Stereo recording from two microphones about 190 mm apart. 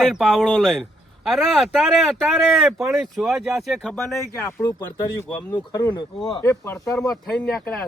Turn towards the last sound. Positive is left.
turn(degrees=5)  # may be behind; listen again after turning